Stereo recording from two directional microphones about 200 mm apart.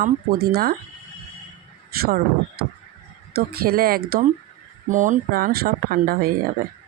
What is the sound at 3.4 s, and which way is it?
Speech, 50° right (ahead or behind).